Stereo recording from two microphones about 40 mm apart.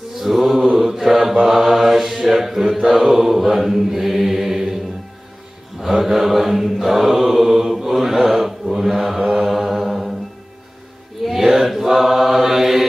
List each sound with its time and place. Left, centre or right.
0.1 s mantra: centre
5.8 s mantra: centre
11.2 s chant: centre